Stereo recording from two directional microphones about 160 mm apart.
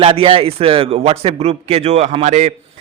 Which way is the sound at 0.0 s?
35° right (ahead or behind).